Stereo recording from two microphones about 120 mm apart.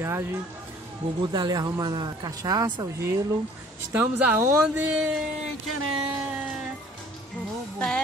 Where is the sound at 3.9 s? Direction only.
15° right (ahead or behind).